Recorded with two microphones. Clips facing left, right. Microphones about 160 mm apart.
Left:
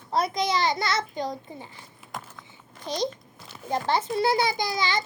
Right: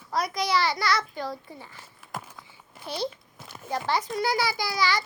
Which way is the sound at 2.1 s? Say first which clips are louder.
Right 1 dB; 5° right (ahead or behind).